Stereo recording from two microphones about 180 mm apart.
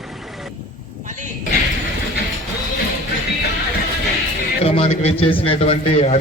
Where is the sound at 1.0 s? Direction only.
45° right (ahead or behind).